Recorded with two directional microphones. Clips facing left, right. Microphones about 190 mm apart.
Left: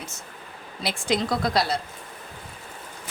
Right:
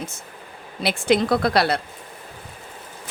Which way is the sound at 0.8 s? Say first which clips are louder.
Right 6 dB; 65° right (ahead or behind).